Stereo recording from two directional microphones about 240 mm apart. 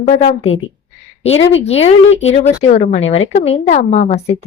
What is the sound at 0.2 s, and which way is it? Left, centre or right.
Speech, left.